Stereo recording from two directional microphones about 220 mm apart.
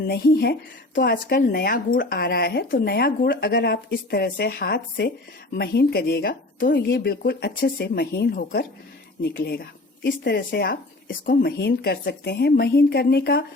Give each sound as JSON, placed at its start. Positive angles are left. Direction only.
{"t": 0.1, "sound": "a woman's voice", "side_deg": 45}